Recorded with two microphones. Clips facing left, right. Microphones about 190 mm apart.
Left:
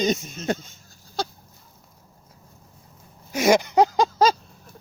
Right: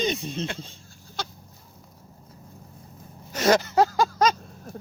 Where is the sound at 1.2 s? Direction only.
35° left (ahead or behind).